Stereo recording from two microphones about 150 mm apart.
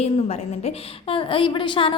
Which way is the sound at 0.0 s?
45° left (ahead or behind).